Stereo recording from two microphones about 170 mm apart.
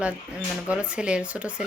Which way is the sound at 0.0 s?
5° right (ahead or behind).